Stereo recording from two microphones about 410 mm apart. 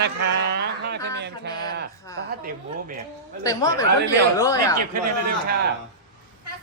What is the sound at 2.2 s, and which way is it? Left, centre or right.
Speech, right.